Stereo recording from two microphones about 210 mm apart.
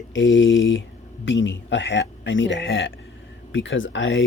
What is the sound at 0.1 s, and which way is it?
Speech, 65° left (ahead or behind).